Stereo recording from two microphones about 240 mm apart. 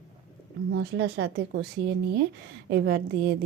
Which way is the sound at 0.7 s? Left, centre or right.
Right.